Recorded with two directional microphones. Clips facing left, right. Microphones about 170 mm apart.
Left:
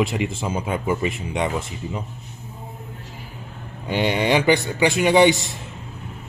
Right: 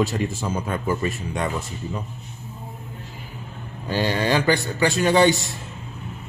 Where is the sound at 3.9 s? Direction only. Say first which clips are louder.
Left 2 dB; 20° left (ahead or behind).